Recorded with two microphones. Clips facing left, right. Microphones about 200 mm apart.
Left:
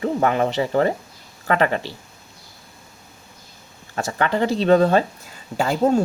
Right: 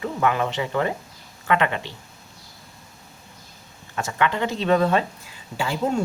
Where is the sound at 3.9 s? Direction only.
35° left (ahead or behind).